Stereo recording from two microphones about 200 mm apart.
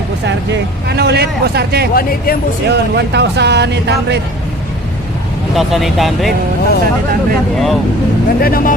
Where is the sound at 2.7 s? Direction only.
55° right (ahead or behind).